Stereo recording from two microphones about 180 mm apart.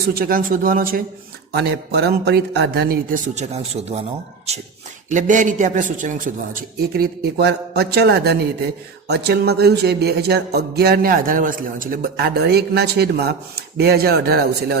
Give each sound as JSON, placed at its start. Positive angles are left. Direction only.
{"t": 0.0, "sound": "a man's voice", "side_deg": -55}
{"t": 1.5, "sound": "music", "side_deg": -65}
{"t": 3.3, "sound": "speech", "side_deg": -35}
{"t": 5.0, "sound": "a man's voice", "side_deg": -45}
{"t": 9.0, "sound": "music", "side_deg": -60}